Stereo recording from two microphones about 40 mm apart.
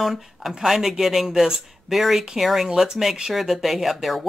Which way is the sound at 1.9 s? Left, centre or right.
Centre.